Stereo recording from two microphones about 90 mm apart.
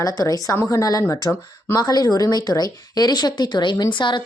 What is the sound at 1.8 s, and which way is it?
Speech, 50° left (ahead or behind).